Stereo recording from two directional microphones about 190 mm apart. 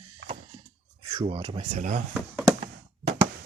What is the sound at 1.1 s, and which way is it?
Speech, 30° right (ahead or behind).